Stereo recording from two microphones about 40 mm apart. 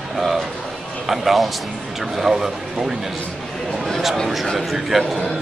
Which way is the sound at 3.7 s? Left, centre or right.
Centre.